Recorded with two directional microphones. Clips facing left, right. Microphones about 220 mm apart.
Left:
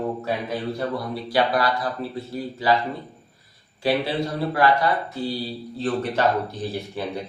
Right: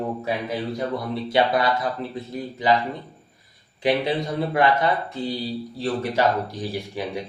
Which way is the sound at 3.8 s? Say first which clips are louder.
Right 1 dB; 20° right (ahead or behind).